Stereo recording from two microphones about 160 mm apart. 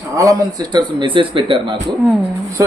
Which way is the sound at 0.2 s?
25° right (ahead or behind).